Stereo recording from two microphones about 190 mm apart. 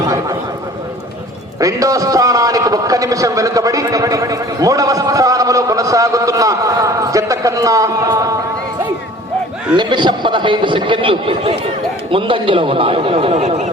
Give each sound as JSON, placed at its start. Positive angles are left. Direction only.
{"t": 1.5, "sound": "a man's voice", "side_deg": -15}
{"t": 9.7, "sound": "a man's voice", "side_deg": -25}